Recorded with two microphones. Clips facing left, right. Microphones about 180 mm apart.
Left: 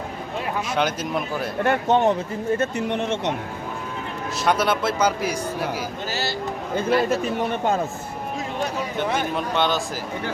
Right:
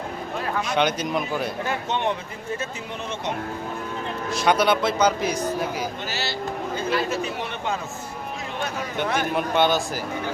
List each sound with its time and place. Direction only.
0.7 s speech: 5° left (ahead or behind)
1.6 s speech: 50° left (ahead or behind)
2.6 s speech: 70° left (ahead or behind)
4.4 s speech: centre (ahead or behind)
6.7 s speech: 50° left (ahead or behind)
9.3 s speech: 5° right (ahead or behind)